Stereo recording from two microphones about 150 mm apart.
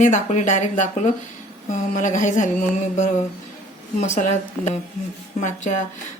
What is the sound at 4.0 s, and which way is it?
A woman's voice, 50° left (ahead or behind).